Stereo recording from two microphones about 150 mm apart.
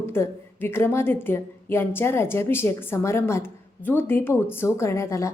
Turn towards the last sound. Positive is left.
turn(degrees=20)  # may be behind; listen again after turning